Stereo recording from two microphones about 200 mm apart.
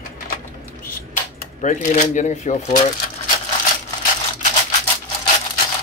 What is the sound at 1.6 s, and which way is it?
Speech, 40° left (ahead or behind).